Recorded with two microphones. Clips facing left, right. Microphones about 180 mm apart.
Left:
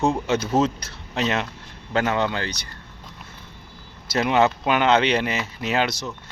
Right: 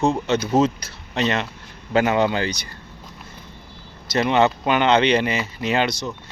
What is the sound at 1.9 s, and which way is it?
Speech, 10° right (ahead or behind).